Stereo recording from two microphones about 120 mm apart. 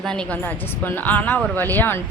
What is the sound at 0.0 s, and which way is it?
Speech, 5° left (ahead or behind).